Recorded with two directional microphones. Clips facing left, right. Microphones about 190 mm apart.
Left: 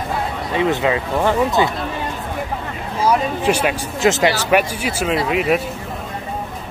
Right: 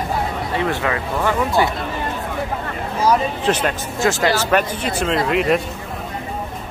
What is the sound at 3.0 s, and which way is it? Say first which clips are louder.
Speech: left 1 dB; 10° left (ahead or behind).